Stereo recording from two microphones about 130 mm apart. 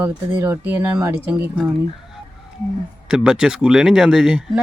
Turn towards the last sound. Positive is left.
turn(degrees=-5)  # may be behind; listen again after turning